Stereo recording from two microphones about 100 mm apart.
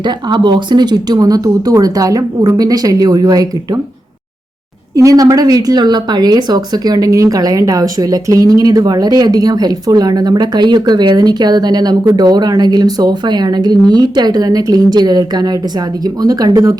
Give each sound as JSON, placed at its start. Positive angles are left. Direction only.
{"t": 0.0, "sound": "speech", "side_deg": -50}
{"t": 4.9, "sound": "speech", "side_deg": -35}